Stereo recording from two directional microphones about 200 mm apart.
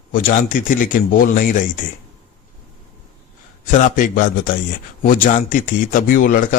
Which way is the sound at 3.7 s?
40° left (ahead or behind).